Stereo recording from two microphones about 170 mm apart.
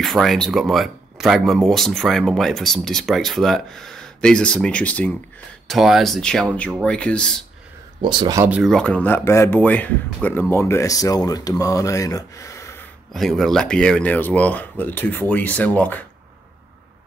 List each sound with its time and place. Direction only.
0.0 s speech: centre (ahead or behind)
8.0 s speech: 25° right (ahead or behind)
8.5 s speech: 5° right (ahead or behind)
8.7 s speech: 5° left (ahead or behind)
13.1 s speech: centre (ahead or behind)